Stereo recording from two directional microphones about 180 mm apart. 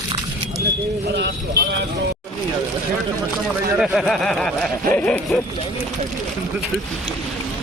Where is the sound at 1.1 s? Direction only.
70° right (ahead or behind).